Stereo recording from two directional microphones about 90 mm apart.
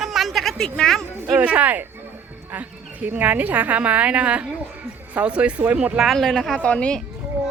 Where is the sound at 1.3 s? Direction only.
15° right (ahead or behind); by 6.5 s centre (ahead or behind).